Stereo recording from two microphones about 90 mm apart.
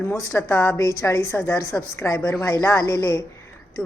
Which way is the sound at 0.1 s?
30° left (ahead or behind).